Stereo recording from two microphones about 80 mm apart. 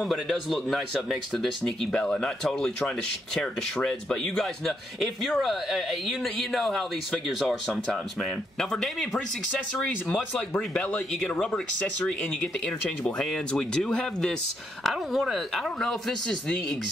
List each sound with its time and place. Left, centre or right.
0.0 s a man's voice: centre
9.8 s a man's voice: centre